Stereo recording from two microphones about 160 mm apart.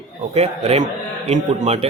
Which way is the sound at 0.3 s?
40° right (ahead or behind).